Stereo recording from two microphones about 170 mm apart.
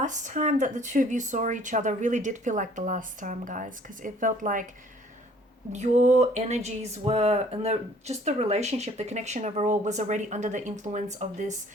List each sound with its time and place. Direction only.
0.0 s speech: 45° right (ahead or behind)
5.7 s speech: 45° right (ahead or behind)